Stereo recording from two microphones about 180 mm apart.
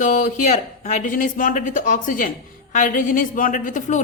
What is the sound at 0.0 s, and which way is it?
A woman's voice, 45° left (ahead or behind).